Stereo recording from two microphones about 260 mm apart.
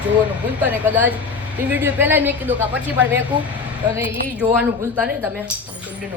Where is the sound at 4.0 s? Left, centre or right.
Centre.